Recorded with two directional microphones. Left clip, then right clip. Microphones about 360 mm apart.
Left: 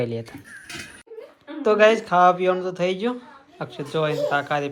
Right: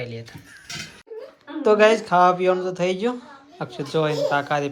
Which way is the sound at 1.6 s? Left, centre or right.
Centre.